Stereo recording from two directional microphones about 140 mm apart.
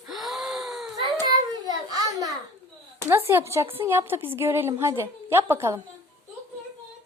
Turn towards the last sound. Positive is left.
turn(degrees=-15)  # may be behind; listen again after turning